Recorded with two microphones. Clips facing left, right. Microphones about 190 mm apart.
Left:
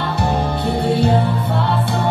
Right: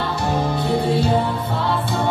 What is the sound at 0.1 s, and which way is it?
Music, 60° left (ahead or behind).